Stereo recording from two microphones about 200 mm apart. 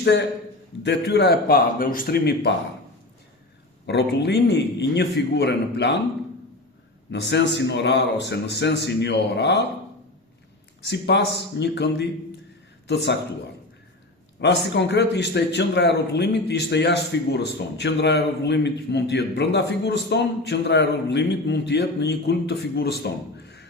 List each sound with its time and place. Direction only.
0.0 s a man's voice: 60° left (ahead or behind)
3.8 s a man's voice: 55° left (ahead or behind)
7.1 s a man's voice: 60° left (ahead or behind)
10.8 s a man's voice: 60° left (ahead or behind)
14.4 s a man's voice: 60° left (ahead or behind)